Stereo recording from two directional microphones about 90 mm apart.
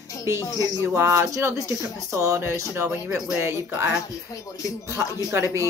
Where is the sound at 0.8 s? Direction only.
30° right (ahead or behind).